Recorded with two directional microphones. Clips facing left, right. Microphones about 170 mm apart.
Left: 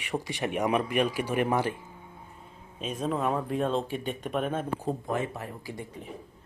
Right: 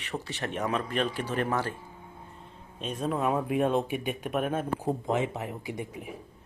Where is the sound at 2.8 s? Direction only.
Centre (ahead or behind); by 5.9 s 20° right (ahead or behind).